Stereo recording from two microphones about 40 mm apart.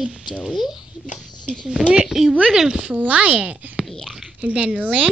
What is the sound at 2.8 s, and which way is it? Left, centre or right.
Speech, right.